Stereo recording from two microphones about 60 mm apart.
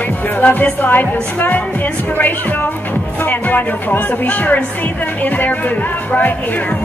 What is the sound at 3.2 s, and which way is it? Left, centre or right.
Speech, left.